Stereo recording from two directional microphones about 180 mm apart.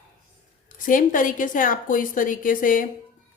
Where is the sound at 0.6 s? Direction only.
50° left (ahead or behind).